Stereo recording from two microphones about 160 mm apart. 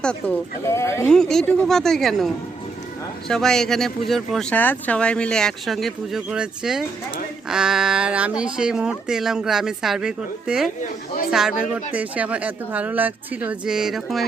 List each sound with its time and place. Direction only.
0.6 s speech: 15° left (ahead or behind)
1.1 s speech: 5° left (ahead or behind)